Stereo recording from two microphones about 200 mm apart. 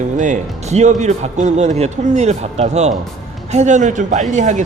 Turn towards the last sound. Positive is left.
turn(degrees=-35)  # may be behind; listen again after turning